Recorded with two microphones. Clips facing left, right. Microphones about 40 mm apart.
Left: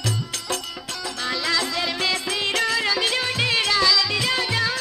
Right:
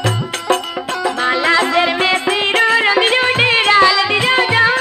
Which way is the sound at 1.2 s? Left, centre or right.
Right.